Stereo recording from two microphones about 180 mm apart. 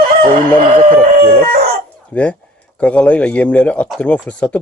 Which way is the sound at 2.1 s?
10° left (ahead or behind).